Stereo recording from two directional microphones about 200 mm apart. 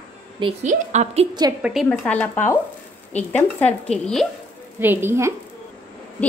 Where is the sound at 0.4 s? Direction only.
30° right (ahead or behind).